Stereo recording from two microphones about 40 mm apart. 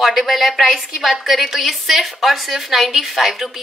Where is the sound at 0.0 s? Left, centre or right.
Centre.